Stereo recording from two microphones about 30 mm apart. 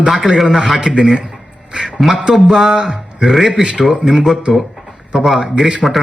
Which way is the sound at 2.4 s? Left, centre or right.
Centre.